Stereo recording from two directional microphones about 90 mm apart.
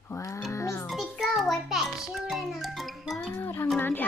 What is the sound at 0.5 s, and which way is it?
Speech, 35° left (ahead or behind).